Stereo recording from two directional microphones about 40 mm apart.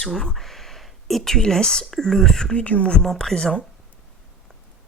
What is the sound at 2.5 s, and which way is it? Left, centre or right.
Speech, left.